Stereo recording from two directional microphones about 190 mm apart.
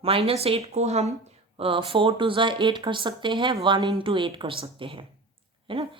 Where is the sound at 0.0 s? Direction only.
30° right (ahead or behind).